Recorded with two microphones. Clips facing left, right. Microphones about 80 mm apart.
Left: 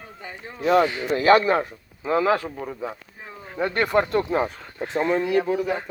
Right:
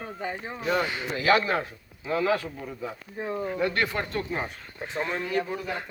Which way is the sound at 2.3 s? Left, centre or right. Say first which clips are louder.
Left 4 dB; left.